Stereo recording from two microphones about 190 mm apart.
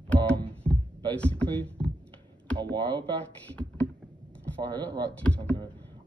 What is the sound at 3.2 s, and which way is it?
Speech, 5° left (ahead or behind).